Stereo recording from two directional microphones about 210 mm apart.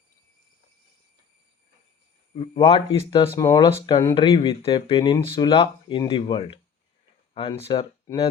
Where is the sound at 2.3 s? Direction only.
25° left (ahead or behind).